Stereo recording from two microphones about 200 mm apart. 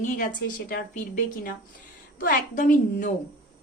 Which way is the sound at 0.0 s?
40° left (ahead or behind).